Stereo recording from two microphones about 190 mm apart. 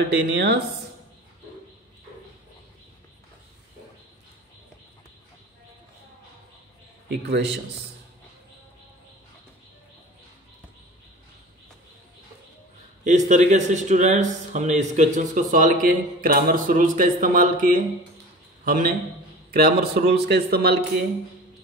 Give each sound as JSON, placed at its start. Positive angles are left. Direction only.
{"t": 0.4, "sound": "speech", "side_deg": -60}
{"t": 7.1, "sound": "speech", "side_deg": -65}
{"t": 13.0, "sound": "a man's voice", "side_deg": -40}